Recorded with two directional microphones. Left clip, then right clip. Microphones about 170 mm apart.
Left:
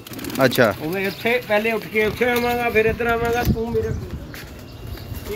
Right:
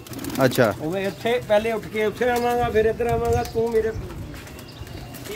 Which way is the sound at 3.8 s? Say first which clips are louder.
Right 1 dB; 60° right (ahead or behind).